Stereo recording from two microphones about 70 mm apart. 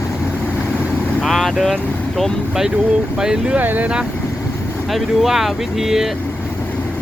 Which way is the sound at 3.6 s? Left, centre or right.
Right.